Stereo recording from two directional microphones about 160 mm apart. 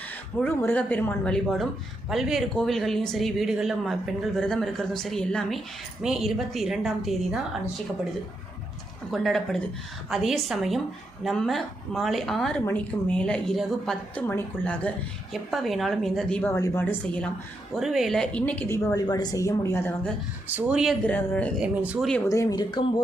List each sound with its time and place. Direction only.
0.3 s a woman's voice: 10° left (ahead or behind)
9.1 s speech: centre (ahead or behind)
16.4 s a woman's voice: 20° left (ahead or behind)
17.7 s a woman's voice: centre (ahead or behind); by 19.9 s 15° left (ahead or behind)
20.5 s speech: 10° right (ahead or behind)
21.1 s a woman's voice: 10° left (ahead or behind)
21.6 s speech: 10° right (ahead or behind)
22.3 s speech: 20° left (ahead or behind)